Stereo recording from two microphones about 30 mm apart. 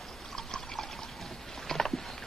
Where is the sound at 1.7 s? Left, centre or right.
Left.